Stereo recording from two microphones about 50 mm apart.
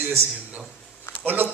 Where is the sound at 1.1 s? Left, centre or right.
Left.